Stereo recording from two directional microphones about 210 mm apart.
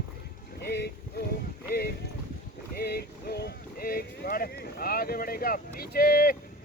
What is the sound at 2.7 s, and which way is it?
Boat, 50° left (ahead or behind).